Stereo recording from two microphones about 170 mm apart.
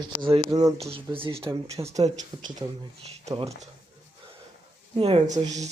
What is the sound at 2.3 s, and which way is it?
Speech, 30° right (ahead or behind).